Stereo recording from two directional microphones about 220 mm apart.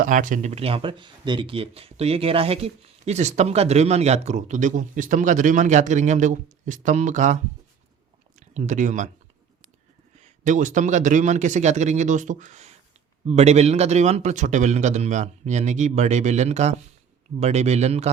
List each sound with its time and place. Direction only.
0.0 s speech: 35° right (ahead or behind)
10.2 s speech: 35° right (ahead or behind)